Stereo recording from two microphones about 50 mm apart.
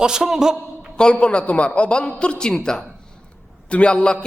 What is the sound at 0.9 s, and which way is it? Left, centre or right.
A man's voice, centre.